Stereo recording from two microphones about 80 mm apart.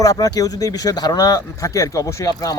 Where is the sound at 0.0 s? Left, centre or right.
Left.